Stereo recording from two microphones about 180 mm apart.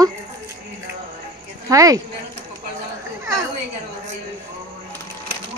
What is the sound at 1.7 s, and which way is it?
Speech, 20° right (ahead or behind).